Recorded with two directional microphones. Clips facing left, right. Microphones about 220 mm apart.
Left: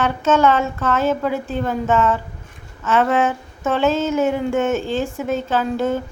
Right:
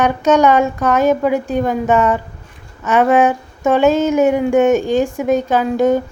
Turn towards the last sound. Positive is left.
turn(degrees=-15)  # may be behind; listen again after turning